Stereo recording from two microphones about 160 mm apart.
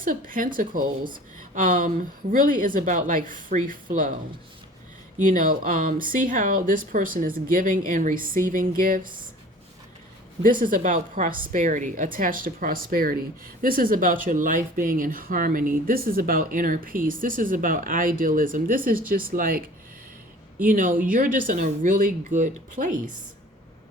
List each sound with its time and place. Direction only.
0.0 s speech: 60° right (ahead or behind)
5.2 s speech: 60° right (ahead or behind)
10.4 s speech: 60° right (ahead or behind)